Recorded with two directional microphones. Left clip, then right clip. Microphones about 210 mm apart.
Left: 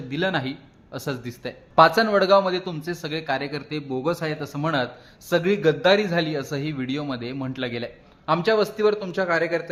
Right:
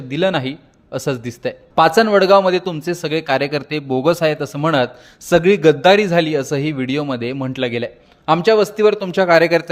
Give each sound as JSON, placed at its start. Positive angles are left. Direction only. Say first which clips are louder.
{"t": 0.1, "sound": "speech", "louder": "right 7 dB", "side_deg": -35}